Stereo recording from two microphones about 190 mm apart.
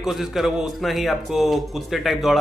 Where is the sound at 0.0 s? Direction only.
Centre (ahead or behind).